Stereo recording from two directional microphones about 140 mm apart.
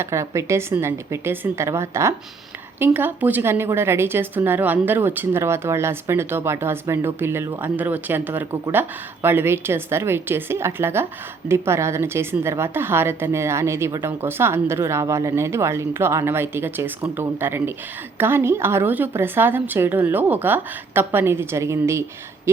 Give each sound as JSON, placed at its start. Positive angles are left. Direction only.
{"t": 0.0, "sound": "a woman's voice", "side_deg": -20}